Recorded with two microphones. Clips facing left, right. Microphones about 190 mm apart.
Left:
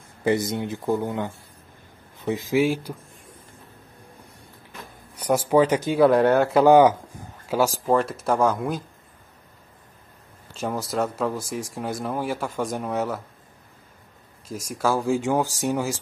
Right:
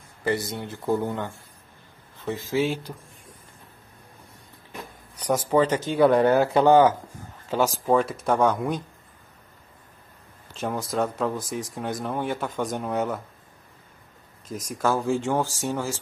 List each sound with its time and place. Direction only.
0.2 s speech: 20° left (ahead or behind)
5.3 s speech: 10° left (ahead or behind)
5.9 s speech: centre (ahead or behind)
6.6 s speech: 15° left (ahead or behind)
10.6 s speech: 5° left (ahead or behind)
14.5 s speech: 5° left (ahead or behind)